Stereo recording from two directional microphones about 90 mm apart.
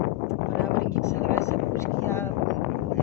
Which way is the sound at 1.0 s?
30° left (ahead or behind).